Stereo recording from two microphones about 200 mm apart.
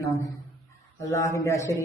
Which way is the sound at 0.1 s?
15° left (ahead or behind).